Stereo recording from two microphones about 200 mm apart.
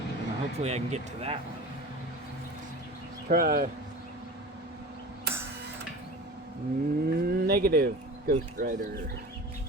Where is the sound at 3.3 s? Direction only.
45° right (ahead or behind).